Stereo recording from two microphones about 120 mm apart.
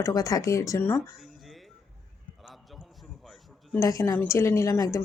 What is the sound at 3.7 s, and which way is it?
Speech, 25° left (ahead or behind).